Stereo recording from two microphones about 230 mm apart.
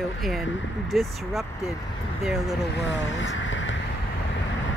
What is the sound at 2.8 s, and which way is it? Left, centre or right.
Speech, left.